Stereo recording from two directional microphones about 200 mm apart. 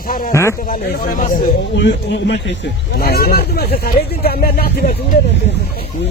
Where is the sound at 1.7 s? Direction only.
60° left (ahead or behind).